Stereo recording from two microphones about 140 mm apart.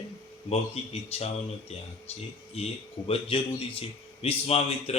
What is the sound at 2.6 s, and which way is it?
Speech, 50° left (ahead or behind).